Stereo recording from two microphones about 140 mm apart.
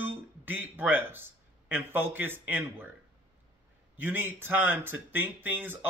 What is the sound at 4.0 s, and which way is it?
Speech, 15° right (ahead or behind).